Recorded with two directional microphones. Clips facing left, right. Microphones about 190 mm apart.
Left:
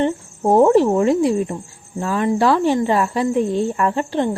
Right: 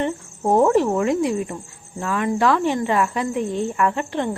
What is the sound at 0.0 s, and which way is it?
Cricket, 30° left (ahead or behind).